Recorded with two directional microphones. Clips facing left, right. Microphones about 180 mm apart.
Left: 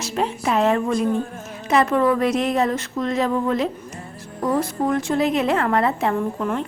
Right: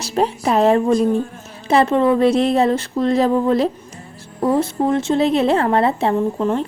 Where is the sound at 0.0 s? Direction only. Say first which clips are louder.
Right 4 dB; 35° right (ahead or behind).